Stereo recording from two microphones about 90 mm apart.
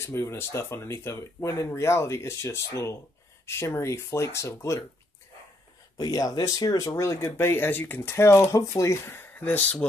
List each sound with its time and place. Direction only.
0.0 s speech: 30° left (ahead or behind)
5.9 s speech: 40° left (ahead or behind); by 9.8 s 20° left (ahead or behind)